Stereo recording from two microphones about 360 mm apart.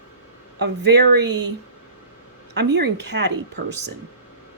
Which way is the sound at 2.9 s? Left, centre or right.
Right.